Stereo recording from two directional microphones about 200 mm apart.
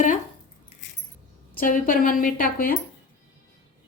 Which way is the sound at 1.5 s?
45° left (ahead or behind).